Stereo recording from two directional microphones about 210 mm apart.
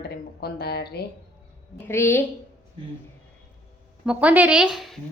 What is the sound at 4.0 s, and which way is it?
Speech, 5° right (ahead or behind).